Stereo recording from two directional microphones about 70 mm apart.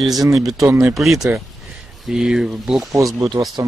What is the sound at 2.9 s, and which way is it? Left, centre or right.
Speech, right.